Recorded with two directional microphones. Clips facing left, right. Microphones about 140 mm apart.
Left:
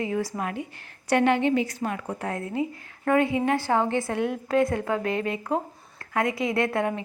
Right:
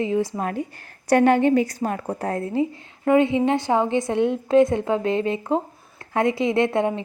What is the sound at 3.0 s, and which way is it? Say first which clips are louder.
A woman's voice: right 4 dB; 25° right (ahead or behind).